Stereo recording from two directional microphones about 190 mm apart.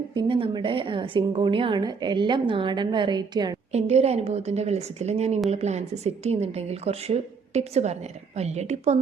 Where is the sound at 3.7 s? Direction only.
35° right (ahead or behind).